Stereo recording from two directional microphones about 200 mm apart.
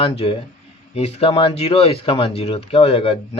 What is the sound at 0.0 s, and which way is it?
Speech, 30° left (ahead or behind).